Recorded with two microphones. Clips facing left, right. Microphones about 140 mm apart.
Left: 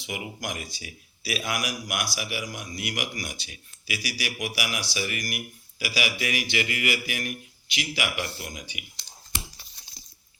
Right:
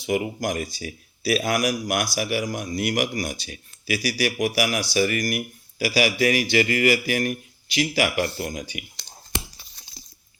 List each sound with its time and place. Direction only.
0.0 s a man's voice: 40° right (ahead or behind)